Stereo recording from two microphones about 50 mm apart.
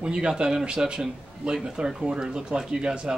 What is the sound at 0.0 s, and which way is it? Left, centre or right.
Speech, centre.